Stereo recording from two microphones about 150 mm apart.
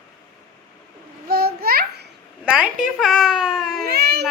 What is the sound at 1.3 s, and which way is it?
Babbling, 90° right.